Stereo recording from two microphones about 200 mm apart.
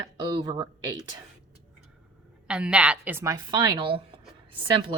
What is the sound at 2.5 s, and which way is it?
A woman's voice, 5° right (ahead or behind).